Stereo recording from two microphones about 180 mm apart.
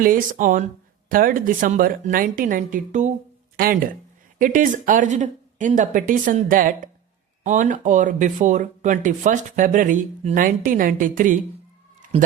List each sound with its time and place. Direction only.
0.0 s speech: 50° right (ahead or behind)